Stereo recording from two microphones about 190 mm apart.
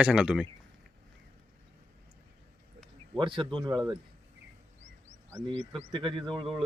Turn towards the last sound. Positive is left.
turn(degrees=-25)  # may be behind; listen again after turning